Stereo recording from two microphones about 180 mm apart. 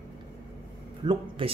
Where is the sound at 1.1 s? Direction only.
30° right (ahead or behind).